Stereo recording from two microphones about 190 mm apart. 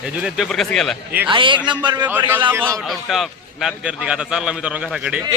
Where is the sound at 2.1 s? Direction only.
10° right (ahead or behind).